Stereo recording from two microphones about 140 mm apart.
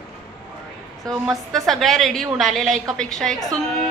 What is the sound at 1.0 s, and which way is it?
A woman's voice, centre (ahead or behind).